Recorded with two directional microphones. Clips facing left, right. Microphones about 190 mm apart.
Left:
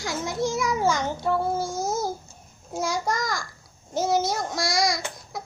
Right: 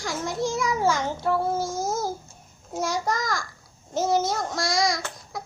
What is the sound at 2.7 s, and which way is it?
A child's voice, centre (ahead or behind).